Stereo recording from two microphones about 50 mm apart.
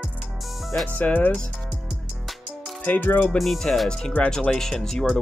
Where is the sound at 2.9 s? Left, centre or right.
Left.